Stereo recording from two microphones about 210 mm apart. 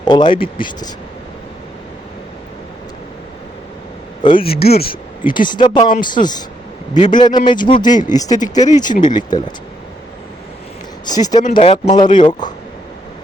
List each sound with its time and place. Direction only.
0.0 s speech: 20° left (ahead or behind)
4.2 s speech: 25° left (ahead or behind)
4.4 s speech: 45° left (ahead or behind)
4.9 s speech: 20° left (ahead or behind)
11.0 s speech: 20° left (ahead or behind)
11.5 s speech: 30° left (ahead or behind)